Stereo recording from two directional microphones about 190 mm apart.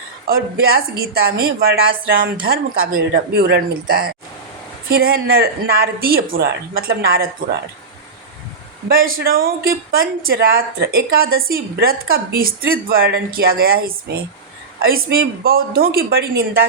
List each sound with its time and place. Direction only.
0.3 s speech: 55° right (ahead or behind)
8.9 s speech: 50° right (ahead or behind)